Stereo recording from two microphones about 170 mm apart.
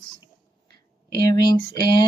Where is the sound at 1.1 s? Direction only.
25° left (ahead or behind).